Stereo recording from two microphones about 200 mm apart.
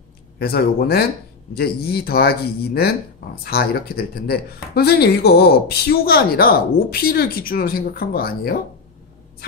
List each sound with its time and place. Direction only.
0.4 s speech: 50° left (ahead or behind)